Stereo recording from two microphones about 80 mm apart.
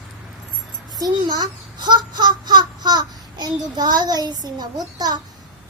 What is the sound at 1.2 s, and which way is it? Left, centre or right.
Speech, right.